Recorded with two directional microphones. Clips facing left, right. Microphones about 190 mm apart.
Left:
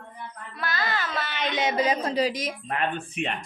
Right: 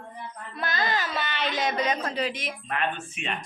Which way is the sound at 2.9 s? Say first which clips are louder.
Left 7 dB; 60° left (ahead or behind).